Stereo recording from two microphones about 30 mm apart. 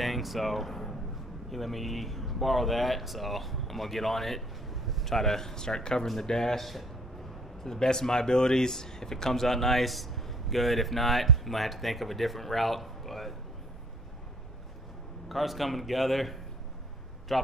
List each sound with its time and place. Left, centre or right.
0.0 s speech: centre
5.1 s speech: centre
6.6 s speech: centre
7.6 s speech: centre
15.2 s speech: centre